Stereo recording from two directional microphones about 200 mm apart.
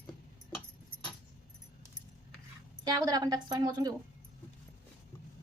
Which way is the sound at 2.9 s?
20° right (ahead or behind).